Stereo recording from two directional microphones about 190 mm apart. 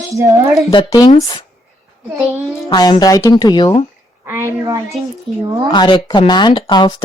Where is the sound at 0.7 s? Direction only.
25° left (ahead or behind).